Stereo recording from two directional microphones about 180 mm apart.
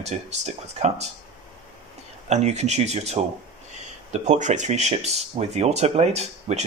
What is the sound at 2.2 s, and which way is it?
Speech, 40° right (ahead or behind).